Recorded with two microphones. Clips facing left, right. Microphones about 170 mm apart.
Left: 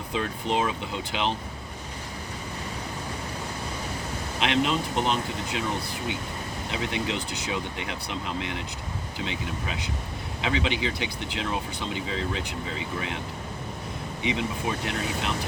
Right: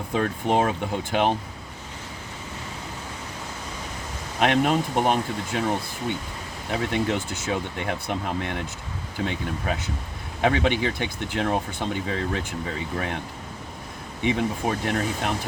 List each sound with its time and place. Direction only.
0.1 s speech: 50° right (ahead or behind)
4.4 s speech: 50° right (ahead or behind)
6.7 s speech: 50° right (ahead or behind)
14.3 s speech: 50° right (ahead or behind)